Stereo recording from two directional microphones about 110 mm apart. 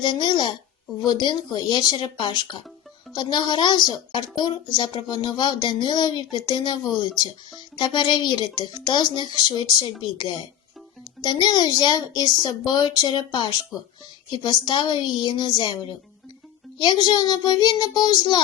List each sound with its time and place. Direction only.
0.0 s a child's voice: 45° left (ahead or behind)
11.2 s a child's voice: 40° left (ahead or behind)
14.7 s a child's voice: 45° left (ahead or behind)